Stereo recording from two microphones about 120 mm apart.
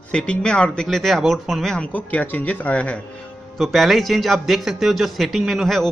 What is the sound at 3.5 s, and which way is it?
A man's voice, centre (ahead or behind).